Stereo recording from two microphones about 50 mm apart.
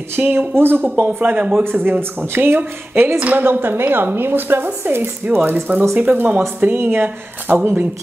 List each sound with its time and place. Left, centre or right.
0.2 s speech: right
3.2 s a woman's voice: right
3.4 s speech: right
6.6 s speech: right